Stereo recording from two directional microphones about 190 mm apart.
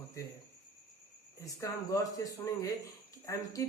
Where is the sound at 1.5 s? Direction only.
15° left (ahead or behind).